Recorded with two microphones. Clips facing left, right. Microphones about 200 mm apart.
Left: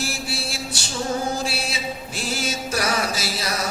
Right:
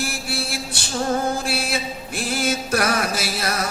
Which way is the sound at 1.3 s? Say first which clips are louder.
Right 3 dB; 55° right (ahead or behind).